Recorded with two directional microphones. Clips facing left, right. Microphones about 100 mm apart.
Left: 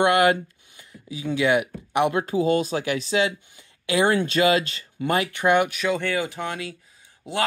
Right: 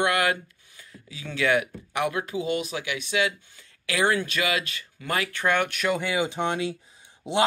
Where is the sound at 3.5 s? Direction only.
20° left (ahead or behind).